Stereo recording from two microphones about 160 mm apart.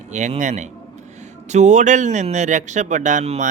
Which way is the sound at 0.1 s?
50° right (ahead or behind).